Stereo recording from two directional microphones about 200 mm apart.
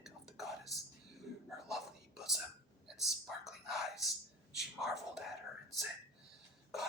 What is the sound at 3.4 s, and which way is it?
Whispering, centre (ahead or behind).